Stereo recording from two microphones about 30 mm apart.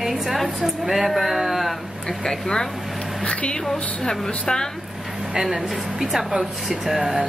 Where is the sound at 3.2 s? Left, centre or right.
Left.